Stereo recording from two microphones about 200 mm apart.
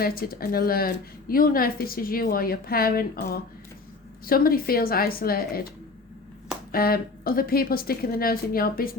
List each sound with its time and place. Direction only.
0.0 s a woman's voice: 50° left (ahead or behind)
6.7 s a woman's voice: 50° left (ahead or behind)